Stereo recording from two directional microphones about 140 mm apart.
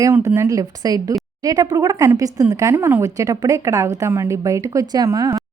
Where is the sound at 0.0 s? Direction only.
25° right (ahead or behind).